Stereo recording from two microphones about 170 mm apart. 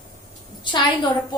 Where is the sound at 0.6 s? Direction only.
25° left (ahead or behind).